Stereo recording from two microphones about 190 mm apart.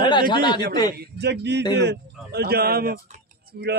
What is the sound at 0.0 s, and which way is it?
Speech, 25° left (ahead or behind).